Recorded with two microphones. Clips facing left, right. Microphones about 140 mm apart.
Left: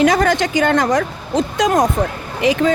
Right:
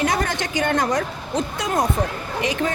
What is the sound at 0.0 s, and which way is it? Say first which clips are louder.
A woman's voice: left 8 dB; 90° left.